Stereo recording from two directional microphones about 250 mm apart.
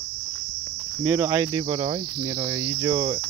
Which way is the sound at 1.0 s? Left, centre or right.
Centre.